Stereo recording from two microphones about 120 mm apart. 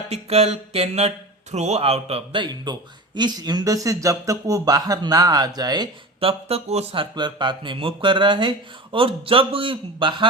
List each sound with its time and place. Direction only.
0.1 s speech: 60° right (ahead or behind); by 5.9 s 35° right (ahead or behind)
6.1 s speech: 55° right (ahead or behind)